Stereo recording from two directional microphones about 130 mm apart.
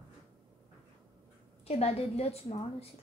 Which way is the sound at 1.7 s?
50° left (ahead or behind).